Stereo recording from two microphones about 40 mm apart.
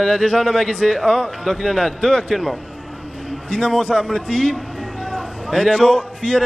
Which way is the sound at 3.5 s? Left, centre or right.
Left.